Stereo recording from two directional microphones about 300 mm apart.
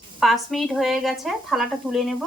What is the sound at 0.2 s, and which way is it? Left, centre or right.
Speech, centre.